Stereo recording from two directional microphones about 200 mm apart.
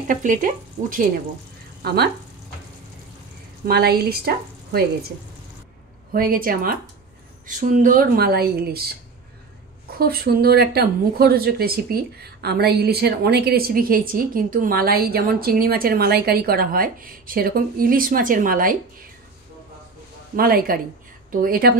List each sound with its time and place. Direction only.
0.1 s speech: 40° right (ahead or behind)
3.6 s speech: 50° right (ahead or behind)
6.1 s speech: 45° right (ahead or behind)
9.9 s speech: 50° right (ahead or behind)
20.3 s speech: 50° right (ahead or behind)